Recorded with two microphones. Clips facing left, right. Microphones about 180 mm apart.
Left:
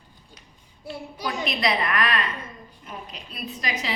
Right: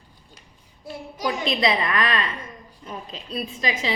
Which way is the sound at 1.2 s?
25° right (ahead or behind).